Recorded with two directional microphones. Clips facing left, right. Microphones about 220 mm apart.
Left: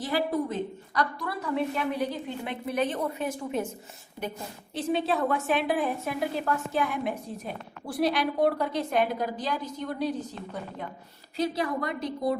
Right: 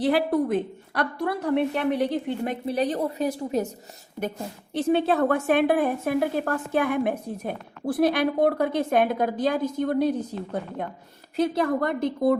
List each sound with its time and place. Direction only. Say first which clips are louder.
0.0 s a woman's voice: right 6 dB; 60° right (ahead or behind)
2.6 s a woman's voice: right 2 dB; 35° right (ahead or behind)
4.2 s a woman's voice: right 5 dB; 55° right (ahead or behind)